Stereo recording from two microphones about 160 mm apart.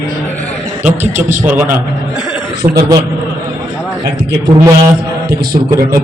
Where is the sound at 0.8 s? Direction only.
50° right (ahead or behind).